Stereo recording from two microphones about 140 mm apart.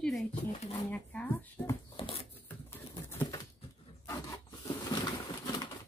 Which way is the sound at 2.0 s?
40° left (ahead or behind).